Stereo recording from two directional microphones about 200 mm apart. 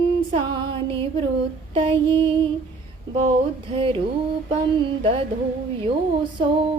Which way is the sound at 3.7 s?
30° right (ahead or behind).